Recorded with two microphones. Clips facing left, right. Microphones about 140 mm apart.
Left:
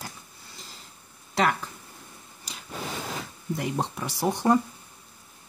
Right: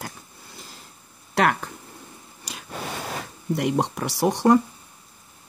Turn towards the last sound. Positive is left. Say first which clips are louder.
# right 5 dB
turn(degrees=-70)  # may be behind; listen again after turning